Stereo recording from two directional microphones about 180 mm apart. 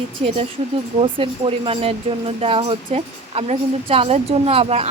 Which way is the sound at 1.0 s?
30° right (ahead or behind).